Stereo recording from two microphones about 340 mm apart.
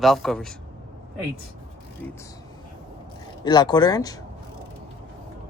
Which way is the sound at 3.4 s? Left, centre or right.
Centre.